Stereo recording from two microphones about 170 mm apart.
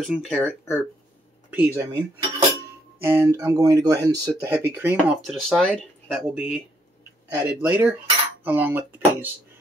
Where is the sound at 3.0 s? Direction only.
15° right (ahead or behind).